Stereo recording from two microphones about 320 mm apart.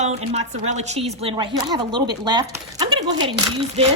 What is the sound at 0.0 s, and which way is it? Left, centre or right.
A woman's voice, right.